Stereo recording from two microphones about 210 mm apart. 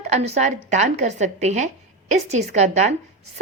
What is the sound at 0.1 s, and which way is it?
A woman's voice, 30° right (ahead or behind).